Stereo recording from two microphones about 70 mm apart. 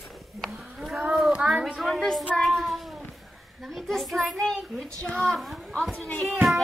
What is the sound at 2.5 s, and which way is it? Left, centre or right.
Cat, centre.